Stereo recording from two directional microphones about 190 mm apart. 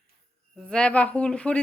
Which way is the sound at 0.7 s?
5° left (ahead or behind).